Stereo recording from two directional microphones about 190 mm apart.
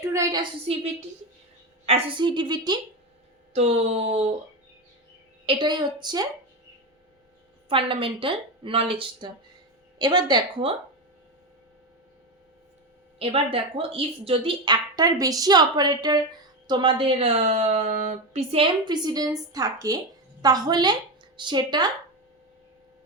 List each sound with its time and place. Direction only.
0.0 s a woman's voice: 15° right (ahead or behind)
1.9 s speech: 25° right (ahead or behind)
3.5 s speech: 35° right (ahead or behind)
5.5 s speech: 25° right (ahead or behind)
7.7 s speech: 30° right (ahead or behind)
13.1 s a woman's voice: 30° right (ahead or behind)